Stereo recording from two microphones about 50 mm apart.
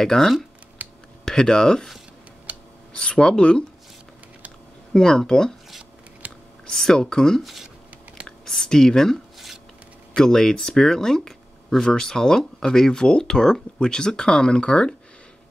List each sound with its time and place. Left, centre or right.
0.0 s speech: centre
0.8 s computer keyboard: right
1.2 s speech: centre
2.9 s speech: centre
4.9 s speech: centre
6.2 s computer keyboard: right
6.7 s speech: centre
7.4 s speech: centre
8.5 s speech: centre